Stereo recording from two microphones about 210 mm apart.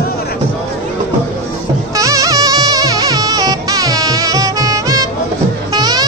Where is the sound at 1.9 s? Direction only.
15° right (ahead or behind).